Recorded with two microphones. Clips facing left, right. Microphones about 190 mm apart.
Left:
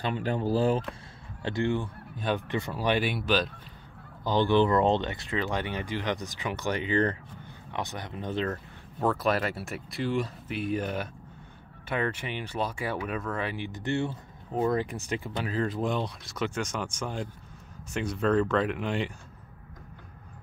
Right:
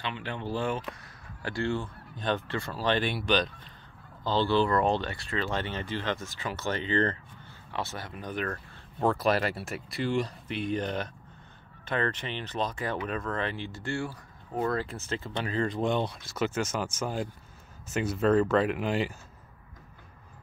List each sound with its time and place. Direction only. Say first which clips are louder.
0.0 s speech: left 6 dB; 40° left (ahead or behind)
1.4 s speech: left 2 dB; 20° left (ahead or behind)
4.2 s speech: left 2 dB; 15° left (ahead or behind)
9.0 s speech: right 1 dB; centre (ahead or behind)